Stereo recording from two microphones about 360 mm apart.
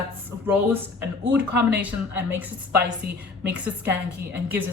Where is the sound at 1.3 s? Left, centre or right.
Centre.